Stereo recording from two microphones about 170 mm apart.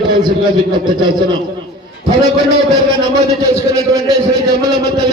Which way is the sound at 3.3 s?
20° right (ahead or behind).